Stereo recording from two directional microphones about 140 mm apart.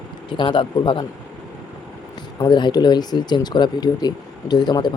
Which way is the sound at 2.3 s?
30° left (ahead or behind).